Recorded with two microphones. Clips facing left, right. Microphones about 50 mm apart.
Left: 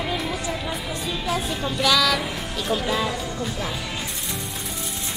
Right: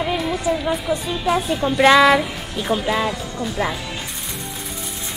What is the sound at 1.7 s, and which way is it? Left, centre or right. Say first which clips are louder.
Speech: right 9 dB; right.